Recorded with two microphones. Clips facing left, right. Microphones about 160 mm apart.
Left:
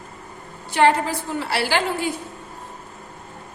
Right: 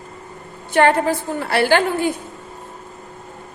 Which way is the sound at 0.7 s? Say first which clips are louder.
Right 3 dB; 50° right (ahead or behind).